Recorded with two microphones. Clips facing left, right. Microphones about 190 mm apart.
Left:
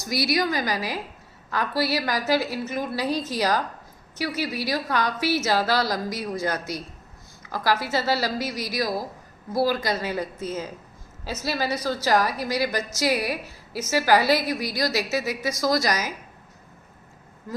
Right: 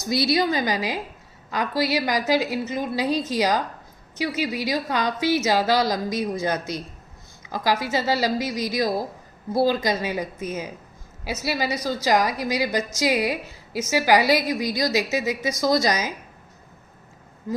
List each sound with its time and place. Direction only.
0.0 s a woman's voice: 25° right (ahead or behind)